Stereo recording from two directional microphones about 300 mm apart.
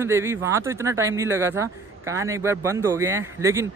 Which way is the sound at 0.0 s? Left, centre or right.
Centre.